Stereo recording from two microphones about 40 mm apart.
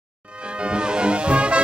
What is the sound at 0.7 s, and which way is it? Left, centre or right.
Music, right.